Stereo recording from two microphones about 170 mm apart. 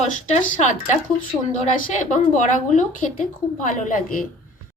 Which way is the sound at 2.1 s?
45° left (ahead or behind).